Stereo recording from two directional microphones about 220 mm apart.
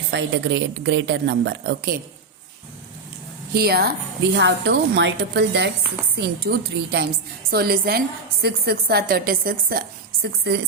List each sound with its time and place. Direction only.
0.1 s a woman's voice: 55° right (ahead or behind)
3.5 s a woman's voice: 45° right (ahead or behind)